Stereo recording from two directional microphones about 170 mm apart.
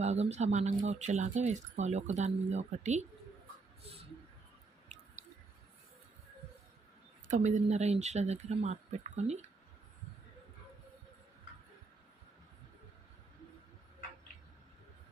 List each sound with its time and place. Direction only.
0.0 s speech: 40° right (ahead or behind)
4.9 s squish: 40° right (ahead or behind)
7.3 s speech: 45° right (ahead or behind)